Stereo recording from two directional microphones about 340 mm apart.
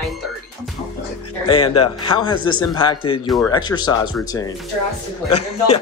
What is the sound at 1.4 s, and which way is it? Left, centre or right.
Speech, centre.